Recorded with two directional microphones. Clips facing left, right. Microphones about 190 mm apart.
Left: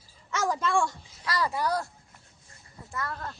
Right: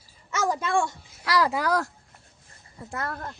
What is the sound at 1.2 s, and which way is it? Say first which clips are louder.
Speech: right 4 dB; 90° right.